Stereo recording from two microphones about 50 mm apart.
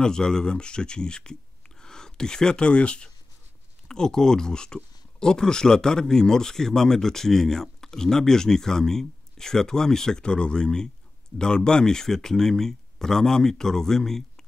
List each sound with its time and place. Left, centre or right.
0.0 s speech: centre